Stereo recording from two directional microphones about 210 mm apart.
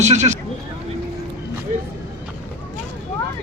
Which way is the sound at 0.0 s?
35° right (ahead or behind).